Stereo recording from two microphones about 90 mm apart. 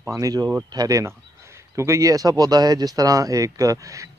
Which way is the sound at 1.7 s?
35° right (ahead or behind).